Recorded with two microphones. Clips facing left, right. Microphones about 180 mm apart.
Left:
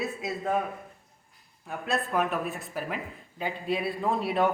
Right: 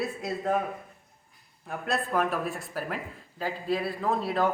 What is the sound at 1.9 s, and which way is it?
A man's voice, centre (ahead or behind).